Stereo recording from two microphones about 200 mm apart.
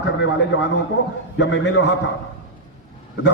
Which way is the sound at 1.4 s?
65° left (ahead or behind).